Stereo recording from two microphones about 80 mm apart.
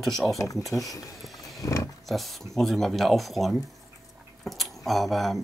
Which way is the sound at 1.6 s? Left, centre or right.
Left.